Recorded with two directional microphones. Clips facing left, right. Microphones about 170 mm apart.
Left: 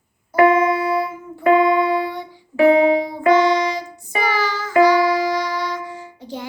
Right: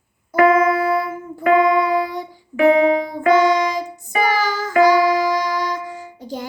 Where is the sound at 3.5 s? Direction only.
45° right (ahead or behind).